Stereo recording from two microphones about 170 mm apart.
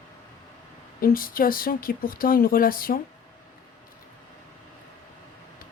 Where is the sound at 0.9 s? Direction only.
55° left (ahead or behind).